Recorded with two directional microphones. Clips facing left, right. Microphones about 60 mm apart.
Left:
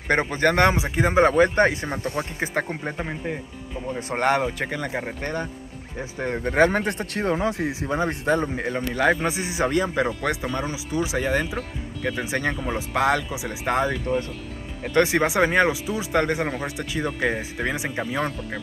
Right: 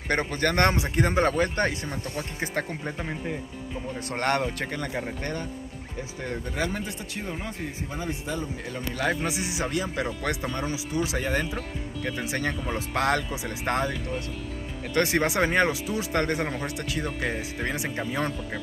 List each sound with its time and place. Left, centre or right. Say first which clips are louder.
0.1 s speech: left 5 dB; centre
1.3 s speech: left 7 dB; left
3.0 s a man's voice: left 3 dB; centre; by 6.5 s left
6.5 s a man's voice: left 13 dB; left
8.9 s a man's voice: left 5 dB; left
10.2 s speech: left 3 dB; centre